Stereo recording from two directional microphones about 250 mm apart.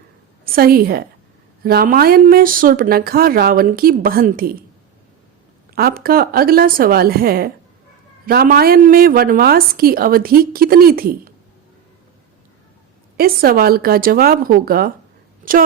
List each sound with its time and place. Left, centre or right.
0.4 s a woman's voice: right
5.7 s a woman's voice: right
13.1 s a woman's voice: right